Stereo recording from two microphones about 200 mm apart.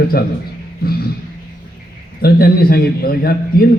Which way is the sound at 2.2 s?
50° left (ahead or behind).